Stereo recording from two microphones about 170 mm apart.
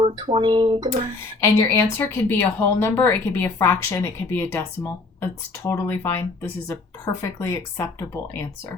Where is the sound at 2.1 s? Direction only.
15° left (ahead or behind).